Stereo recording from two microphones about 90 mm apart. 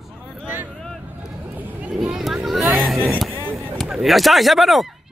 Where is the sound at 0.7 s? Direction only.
5° left (ahead or behind).